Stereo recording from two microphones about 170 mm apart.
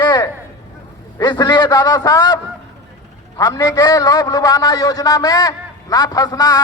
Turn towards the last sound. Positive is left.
turn(degrees=25)  # may be behind; listen again after turning